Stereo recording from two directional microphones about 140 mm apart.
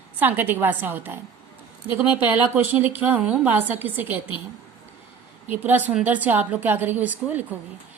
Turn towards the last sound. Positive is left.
turn(degrees=-10)  # may be behind; listen again after turning